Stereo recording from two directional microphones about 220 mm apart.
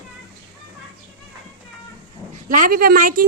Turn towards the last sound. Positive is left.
turn(degrees=-40)  # may be behind; listen again after turning